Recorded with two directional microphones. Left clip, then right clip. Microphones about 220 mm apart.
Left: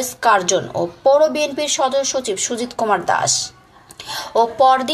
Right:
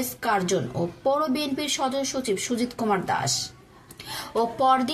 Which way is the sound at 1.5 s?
5° right (ahead or behind).